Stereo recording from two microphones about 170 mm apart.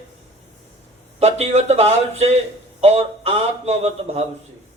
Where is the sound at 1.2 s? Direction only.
40° right (ahead or behind).